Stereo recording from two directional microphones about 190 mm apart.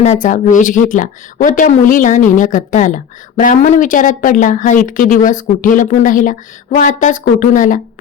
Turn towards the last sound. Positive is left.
turn(degrees=45)  # may be behind; listen again after turning